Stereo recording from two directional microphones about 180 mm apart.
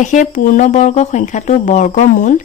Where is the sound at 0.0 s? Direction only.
45° left (ahead or behind).